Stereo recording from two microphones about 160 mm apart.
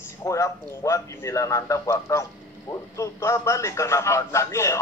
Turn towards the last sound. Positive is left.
turn(degrees=20)  # may be behind; listen again after turning